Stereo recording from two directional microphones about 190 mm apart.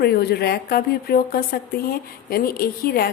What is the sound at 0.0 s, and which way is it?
A woman's voice, 55° left (ahead or behind).